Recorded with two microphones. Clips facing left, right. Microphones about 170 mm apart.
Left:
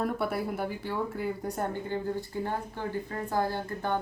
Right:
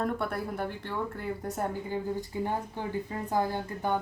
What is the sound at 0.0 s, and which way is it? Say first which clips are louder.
Speech: left 1 dB; 5° left (ahead or behind).